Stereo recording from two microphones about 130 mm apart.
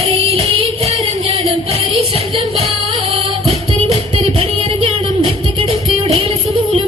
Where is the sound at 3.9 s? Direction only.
45° right (ahead or behind).